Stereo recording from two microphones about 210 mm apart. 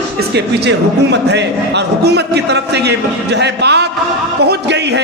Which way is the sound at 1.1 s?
55° right (ahead or behind).